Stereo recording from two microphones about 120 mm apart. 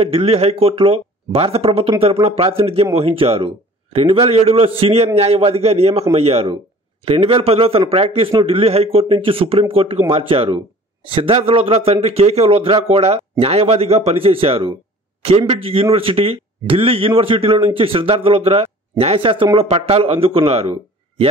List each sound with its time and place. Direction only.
0.0 s speech: 55° right (ahead or behind)
15.2 s speech: 60° right (ahead or behind)